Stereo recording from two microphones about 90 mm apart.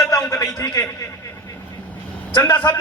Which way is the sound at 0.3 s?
40° left (ahead or behind).